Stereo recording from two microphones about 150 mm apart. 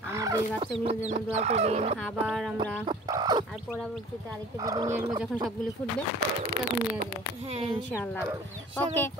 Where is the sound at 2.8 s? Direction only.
30° right (ahead or behind).